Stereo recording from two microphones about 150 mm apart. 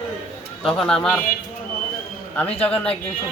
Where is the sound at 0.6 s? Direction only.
5° left (ahead or behind).